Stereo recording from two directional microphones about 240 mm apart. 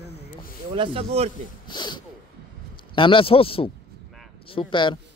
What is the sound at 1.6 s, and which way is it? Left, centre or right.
A man's voice, centre.